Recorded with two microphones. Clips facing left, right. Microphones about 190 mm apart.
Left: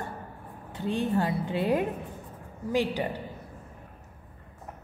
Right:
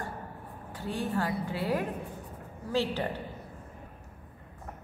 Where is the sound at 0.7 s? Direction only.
20° left (ahead or behind).